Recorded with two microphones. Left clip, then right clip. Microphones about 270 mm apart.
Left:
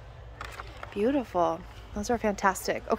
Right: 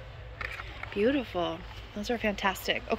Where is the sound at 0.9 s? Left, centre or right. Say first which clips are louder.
Even; centre.